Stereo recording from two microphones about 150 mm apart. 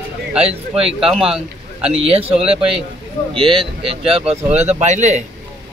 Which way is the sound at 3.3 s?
35° right (ahead or behind).